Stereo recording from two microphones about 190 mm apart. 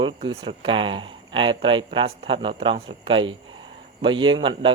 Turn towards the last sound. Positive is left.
turn(degrees=-25)  # may be behind; listen again after turning